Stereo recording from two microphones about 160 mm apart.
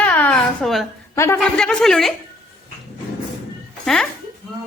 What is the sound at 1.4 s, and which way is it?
Speech, 5° left (ahead or behind).